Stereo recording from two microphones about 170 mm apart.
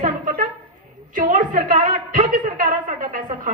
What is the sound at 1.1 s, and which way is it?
A woman's voice, 50° right (ahead or behind).